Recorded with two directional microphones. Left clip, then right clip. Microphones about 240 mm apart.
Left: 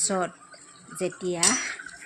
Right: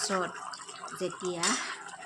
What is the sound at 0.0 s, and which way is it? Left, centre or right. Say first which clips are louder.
Speech: left 3 dB; centre.